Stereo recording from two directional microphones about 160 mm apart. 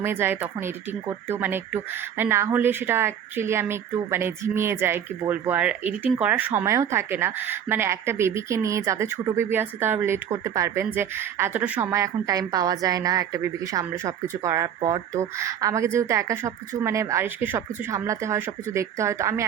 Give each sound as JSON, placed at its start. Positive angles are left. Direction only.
{"t": 0.0, "sound": "speech", "side_deg": -15}